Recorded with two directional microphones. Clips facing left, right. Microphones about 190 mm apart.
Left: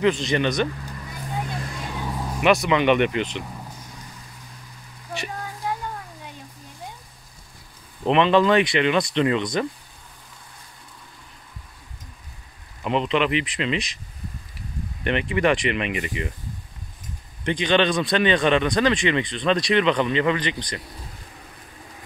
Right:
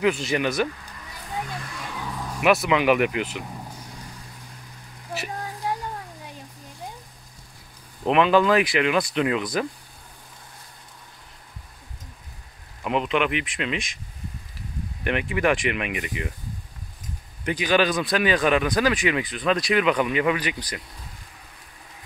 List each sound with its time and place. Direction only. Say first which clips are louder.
0.0 s speech: left 2 dB; 5° right (ahead or behind)
1.3 s vehicle: left 2 dB; 30° left (ahead or behind)
2.4 s speech: left 1 dB; 5° right (ahead or behind)
8.0 s speech: left 1 dB; 5° right (ahead or behind)
12.8 s speech: left 1 dB; 5° right (ahead or behind)
15.0 s speech: left 2 dB; 5° right (ahead or behind)
17.5 s speech: left 1 dB; 5° right (ahead or behind)